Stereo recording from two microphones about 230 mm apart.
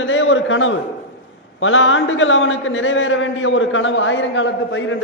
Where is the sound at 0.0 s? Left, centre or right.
Left.